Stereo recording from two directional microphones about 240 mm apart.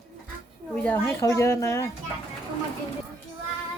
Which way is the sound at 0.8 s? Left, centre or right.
Centre.